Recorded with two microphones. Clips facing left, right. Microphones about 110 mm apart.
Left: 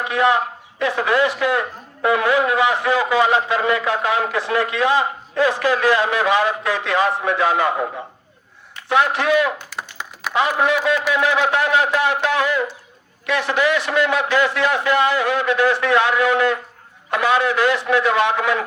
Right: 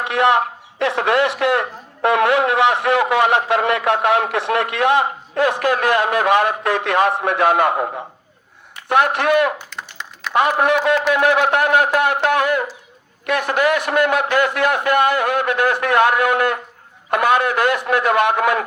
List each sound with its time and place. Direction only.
0.0 s speech: 70° right (ahead or behind)
8.9 s speech: 55° right (ahead or behind)
9.6 s a sound: 10° left (ahead or behind)
10.3 s a man's voice: 55° right (ahead or behind)